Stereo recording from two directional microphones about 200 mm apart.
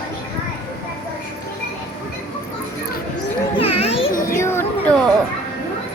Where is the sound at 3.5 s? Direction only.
30° left (ahead or behind).